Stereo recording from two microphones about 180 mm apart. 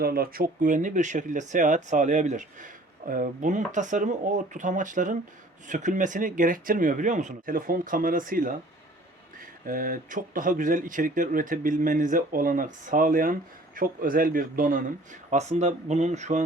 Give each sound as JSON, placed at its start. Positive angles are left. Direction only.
{"t": 0.0, "sound": "speech", "side_deg": -55}